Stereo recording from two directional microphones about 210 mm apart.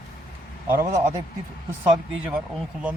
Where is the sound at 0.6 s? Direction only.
10° right (ahead or behind).